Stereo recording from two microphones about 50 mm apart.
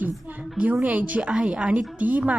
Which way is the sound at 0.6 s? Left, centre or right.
Right.